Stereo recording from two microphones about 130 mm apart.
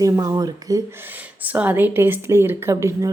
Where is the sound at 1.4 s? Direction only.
10° right (ahead or behind).